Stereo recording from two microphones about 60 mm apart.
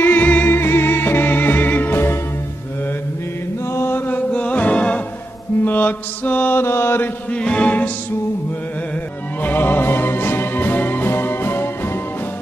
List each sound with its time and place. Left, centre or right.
0.0 s music: left
3.6 s chant: left
4.3 s music: left
5.6 s mantra: left
6.6 s mantra: left
7.2 s music: centre
9.4 s music: left